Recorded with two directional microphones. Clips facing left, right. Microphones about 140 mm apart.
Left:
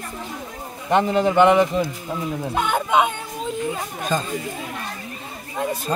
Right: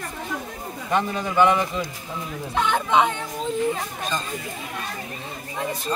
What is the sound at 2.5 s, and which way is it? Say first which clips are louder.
Speech: even; 10° left (ahead or behind).